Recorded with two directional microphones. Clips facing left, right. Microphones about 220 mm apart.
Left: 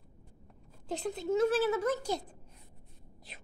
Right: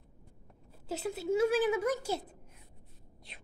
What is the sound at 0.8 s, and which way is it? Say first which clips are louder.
A woman's voice: even; 5° right (ahead or behind).